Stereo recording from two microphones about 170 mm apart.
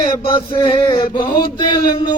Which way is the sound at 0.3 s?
30° left (ahead or behind).